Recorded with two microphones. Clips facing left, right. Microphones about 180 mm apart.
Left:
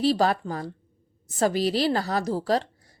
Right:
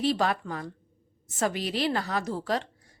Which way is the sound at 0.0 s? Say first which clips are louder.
Left 4 dB; 35° left (ahead or behind).